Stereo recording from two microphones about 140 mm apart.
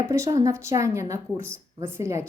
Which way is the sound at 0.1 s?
25° right (ahead or behind).